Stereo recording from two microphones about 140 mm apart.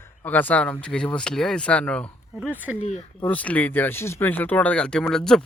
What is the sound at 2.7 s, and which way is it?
Speech, 50° left (ahead or behind).